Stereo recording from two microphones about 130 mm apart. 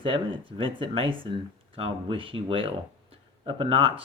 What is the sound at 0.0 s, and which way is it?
Speech, 40° right (ahead or behind).